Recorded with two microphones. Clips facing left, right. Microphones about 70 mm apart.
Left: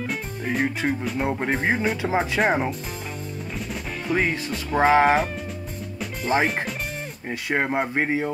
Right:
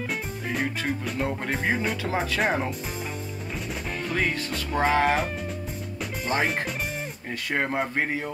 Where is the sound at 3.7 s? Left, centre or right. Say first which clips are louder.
Left 2 dB; centre.